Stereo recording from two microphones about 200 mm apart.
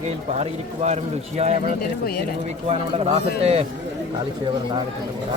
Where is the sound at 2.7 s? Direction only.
30° right (ahead or behind).